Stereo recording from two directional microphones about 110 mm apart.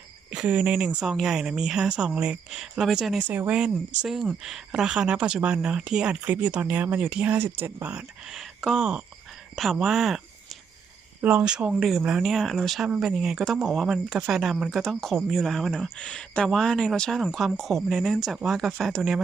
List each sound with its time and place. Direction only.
0.3 s speech: 10° right (ahead or behind)
3.2 s speech: 15° right (ahead or behind)
8.3 s speech: centre (ahead or behind)
11.2 s speech: 15° right (ahead or behind); by 19.2 s centre (ahead or behind)